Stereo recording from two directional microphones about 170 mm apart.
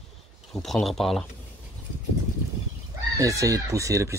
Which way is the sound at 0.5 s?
Centre (ahead or behind).